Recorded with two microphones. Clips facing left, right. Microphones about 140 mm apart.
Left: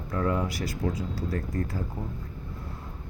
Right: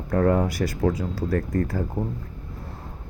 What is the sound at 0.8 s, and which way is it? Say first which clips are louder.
Speech: right 7 dB; 70° right (ahead or behind).